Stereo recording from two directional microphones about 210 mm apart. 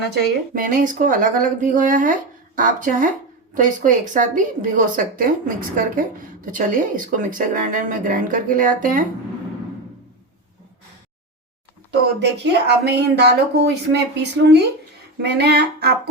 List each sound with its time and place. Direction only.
0.1 s a woman's voice: 40° right (ahead or behind)
11.9 s speech: 55° right (ahead or behind)